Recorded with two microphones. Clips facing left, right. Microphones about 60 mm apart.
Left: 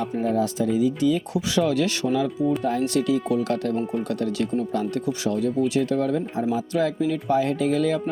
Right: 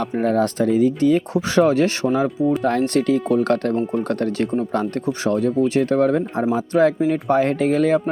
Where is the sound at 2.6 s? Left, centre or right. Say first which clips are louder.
Right 4 dB; right.